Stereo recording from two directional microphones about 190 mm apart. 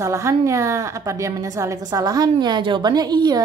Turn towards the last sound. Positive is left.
turn(degrees=-20)  # may be behind; listen again after turning